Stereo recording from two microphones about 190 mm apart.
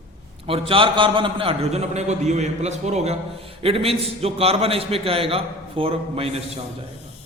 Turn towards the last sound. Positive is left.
turn(degrees=-30)  # may be behind; listen again after turning